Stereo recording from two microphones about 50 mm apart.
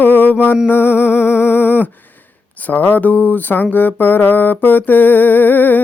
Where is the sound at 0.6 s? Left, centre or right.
Left.